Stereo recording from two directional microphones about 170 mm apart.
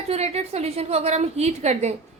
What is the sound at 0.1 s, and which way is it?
A woman's voice, 40° right (ahead or behind).